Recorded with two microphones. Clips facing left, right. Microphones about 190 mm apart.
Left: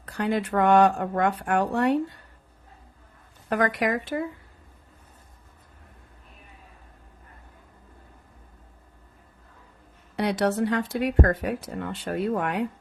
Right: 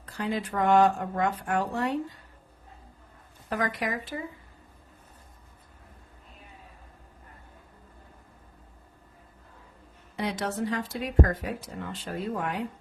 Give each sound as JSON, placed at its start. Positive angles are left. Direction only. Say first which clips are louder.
{"t": 0.0, "sound": "speech", "louder": "left 5 dB", "side_deg": 65}
{"t": 3.5, "sound": "speech", "louder": "left 6 dB", "side_deg": 65}
{"t": 10.2, "sound": "speech", "louder": "left 6 dB", "side_deg": 70}